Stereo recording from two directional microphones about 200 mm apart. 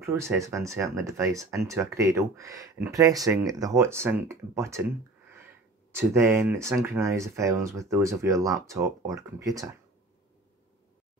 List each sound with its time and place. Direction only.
0.0 s speech: 10° right (ahead or behind)
5.9 s speech: 15° right (ahead or behind)